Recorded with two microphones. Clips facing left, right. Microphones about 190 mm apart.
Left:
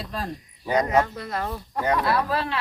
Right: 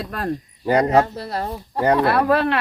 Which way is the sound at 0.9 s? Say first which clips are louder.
Right 5 dB; 30° right (ahead or behind).